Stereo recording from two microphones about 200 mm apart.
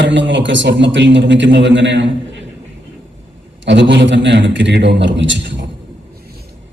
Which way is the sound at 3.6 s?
60° right (ahead or behind).